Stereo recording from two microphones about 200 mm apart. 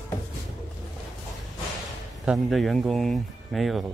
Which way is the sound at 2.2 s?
Centre (ahead or behind).